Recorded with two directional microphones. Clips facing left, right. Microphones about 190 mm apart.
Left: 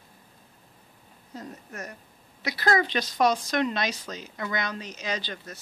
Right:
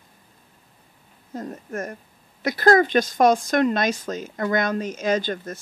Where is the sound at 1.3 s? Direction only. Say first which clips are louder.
Right 9 dB; 50° right (ahead or behind).